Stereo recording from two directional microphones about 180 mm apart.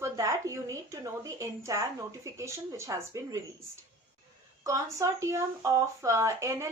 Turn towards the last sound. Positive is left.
turn(degrees=-15)  # may be behind; listen again after turning